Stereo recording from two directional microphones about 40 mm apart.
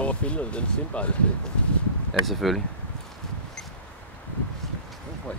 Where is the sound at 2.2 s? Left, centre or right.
Centre.